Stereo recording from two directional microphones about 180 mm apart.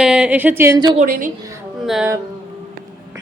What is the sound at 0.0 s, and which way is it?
Speech, 5° right (ahead or behind).